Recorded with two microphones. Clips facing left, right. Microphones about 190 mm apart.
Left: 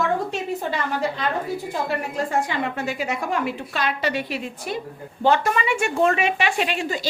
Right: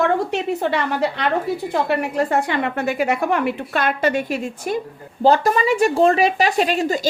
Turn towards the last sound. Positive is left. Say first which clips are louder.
# right 6 dB
turn(degrees=-40)  # may be behind; listen again after turning